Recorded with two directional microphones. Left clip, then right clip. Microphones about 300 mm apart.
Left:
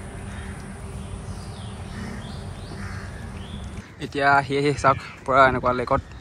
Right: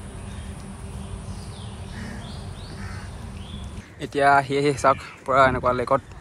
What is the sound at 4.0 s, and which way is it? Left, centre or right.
Speech, centre.